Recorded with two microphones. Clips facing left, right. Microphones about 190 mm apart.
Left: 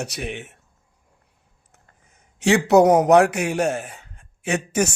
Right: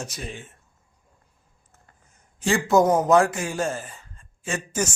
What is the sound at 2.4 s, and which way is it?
A man's voice, 75° left (ahead or behind).